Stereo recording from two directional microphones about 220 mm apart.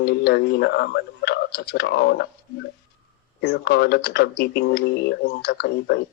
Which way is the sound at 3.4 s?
45° left (ahead or behind).